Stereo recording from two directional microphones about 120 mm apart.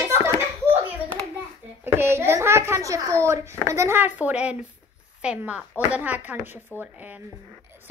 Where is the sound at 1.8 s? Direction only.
20° right (ahead or behind).